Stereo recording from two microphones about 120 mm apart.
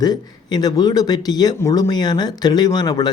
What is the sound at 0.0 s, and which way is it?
Speech, 35° left (ahead or behind).